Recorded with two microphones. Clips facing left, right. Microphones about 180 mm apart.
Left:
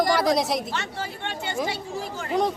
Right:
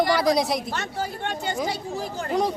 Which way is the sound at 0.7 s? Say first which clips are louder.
Right 2 dB; 45° right (ahead or behind).